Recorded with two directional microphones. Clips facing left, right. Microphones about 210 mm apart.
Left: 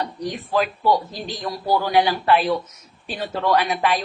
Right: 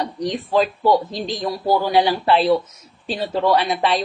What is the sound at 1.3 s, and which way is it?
Speech, 15° right (ahead or behind).